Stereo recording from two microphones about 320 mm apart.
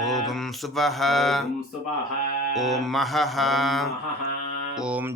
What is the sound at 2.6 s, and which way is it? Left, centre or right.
Music, centre.